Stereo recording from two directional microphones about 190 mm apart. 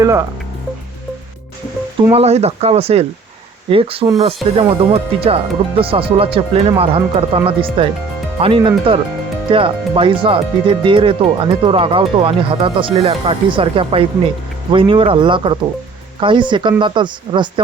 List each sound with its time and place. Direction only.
0.0 s speech: 15° right (ahead or behind)
2.0 s speech: 30° right (ahead or behind)